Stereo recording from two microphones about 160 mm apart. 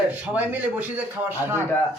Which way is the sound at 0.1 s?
10° right (ahead or behind).